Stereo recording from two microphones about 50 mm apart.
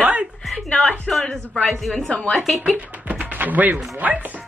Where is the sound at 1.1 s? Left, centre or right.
Centre.